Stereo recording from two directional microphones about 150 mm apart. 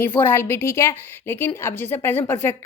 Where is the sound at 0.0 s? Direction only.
15° left (ahead or behind).